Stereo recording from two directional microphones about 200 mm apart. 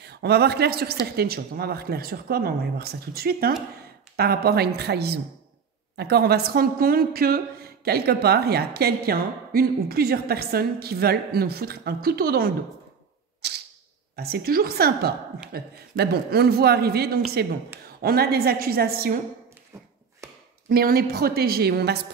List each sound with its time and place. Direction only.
0.0 s a woman's voice: 55° right (ahead or behind)
13.4 s camera: 55° right (ahead or behind)
14.1 s a woman's voice: 50° right (ahead or behind)
20.6 s a woman's voice: 50° right (ahead or behind)